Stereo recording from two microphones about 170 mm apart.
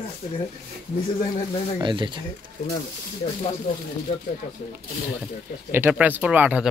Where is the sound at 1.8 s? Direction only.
30° right (ahead or behind).